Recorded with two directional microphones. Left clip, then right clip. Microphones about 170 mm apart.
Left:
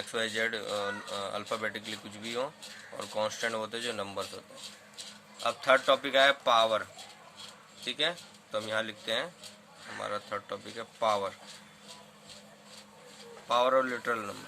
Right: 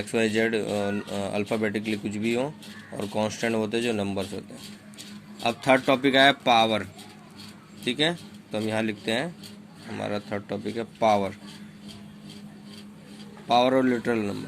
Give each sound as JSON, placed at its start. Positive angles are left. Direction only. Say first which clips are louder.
{"t": 0.1, "sound": "speech", "louder": "right 8 dB", "side_deg": -20}
{"t": 5.4, "sound": "speech", "louder": "right 4 dB", "side_deg": -25}
{"t": 7.9, "sound": "speech", "louder": "right 6 dB", "side_deg": -30}
{"t": 13.5, "sound": "speech", "louder": "right 5 dB", "side_deg": -25}